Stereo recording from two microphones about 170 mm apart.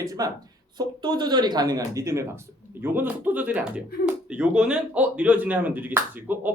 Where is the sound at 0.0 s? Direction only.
20° right (ahead or behind).